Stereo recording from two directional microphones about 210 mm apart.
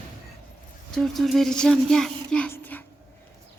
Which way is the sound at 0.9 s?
Centre (ahead or behind).